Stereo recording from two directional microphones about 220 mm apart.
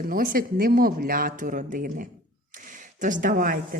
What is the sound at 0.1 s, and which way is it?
A woman's voice, 40° right (ahead or behind).